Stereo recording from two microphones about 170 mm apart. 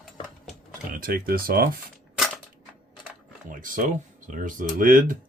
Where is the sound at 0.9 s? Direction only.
55° right (ahead or behind).